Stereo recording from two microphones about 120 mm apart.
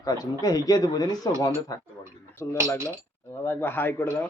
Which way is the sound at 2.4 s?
25° left (ahead or behind).